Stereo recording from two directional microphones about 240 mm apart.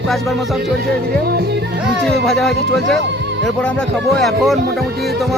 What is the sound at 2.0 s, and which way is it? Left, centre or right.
Speech, centre.